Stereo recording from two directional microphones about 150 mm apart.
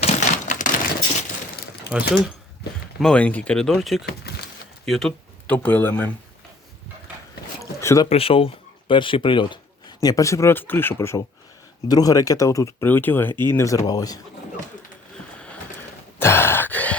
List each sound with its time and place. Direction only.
0.0 s typewriter: 55° left (ahead or behind)
1.9 s speech: 5° right (ahead or behind)
3.0 s speech: 5° left (ahead or behind)
4.0 s a sound: 90° left
4.9 s speech: 5° left (ahead or behind)
7.6 s a sound: 20° left (ahead or behind)
8.1 s speech: 40° left (ahead or behind)
16.1 s sigh: 15° left (ahead or behind)